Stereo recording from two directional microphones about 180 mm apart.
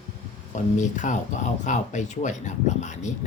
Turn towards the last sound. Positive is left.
turn(degrees=40)  # may be behind; listen again after turning